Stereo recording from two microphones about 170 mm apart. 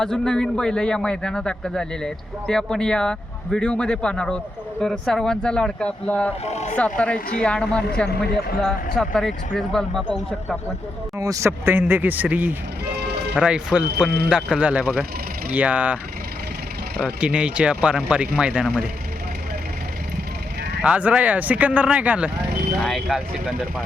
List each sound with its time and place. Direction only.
0.0 s a man's voice: 5° left (ahead or behind)
6.4 s speech: 40° left (ahead or behind)
6.7 s a man's voice: 5° left (ahead or behind)
11.2 s speech: 20° right (ahead or behind)
13.0 s music: 75° right (ahead or behind)
13.3 s a man's voice: 5° right (ahead or behind)
17.0 s speech: 5° right (ahead or behind)
20.8 s a man's voice: 10° right (ahead or behind)